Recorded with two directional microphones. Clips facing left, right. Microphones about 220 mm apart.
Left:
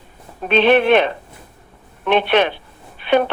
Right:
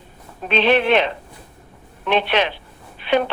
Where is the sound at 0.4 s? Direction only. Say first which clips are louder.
Left 4 dB; 50° left (ahead or behind).